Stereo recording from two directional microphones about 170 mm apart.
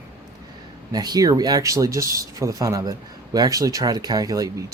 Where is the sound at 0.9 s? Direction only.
20° right (ahead or behind).